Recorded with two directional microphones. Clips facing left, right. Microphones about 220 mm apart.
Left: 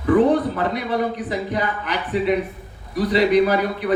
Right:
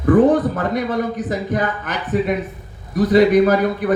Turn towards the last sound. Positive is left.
turn(degrees=-45)  # may be behind; listen again after turning